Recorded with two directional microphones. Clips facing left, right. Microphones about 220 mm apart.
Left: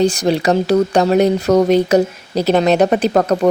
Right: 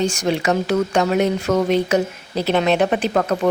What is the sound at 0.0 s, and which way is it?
Speech, 35° left (ahead or behind).